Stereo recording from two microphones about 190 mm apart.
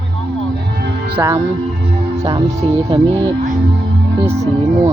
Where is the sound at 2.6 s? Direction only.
30° right (ahead or behind).